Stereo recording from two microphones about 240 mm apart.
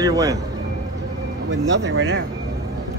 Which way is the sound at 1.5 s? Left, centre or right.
Right.